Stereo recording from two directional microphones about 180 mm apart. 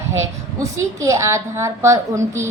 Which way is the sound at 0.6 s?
15° right (ahead or behind).